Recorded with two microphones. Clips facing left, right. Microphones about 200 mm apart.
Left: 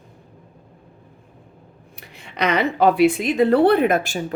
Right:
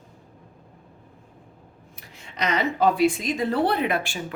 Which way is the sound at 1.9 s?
65° left (ahead or behind).